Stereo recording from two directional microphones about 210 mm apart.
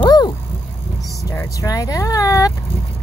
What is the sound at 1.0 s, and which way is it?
Speech, 10° left (ahead or behind).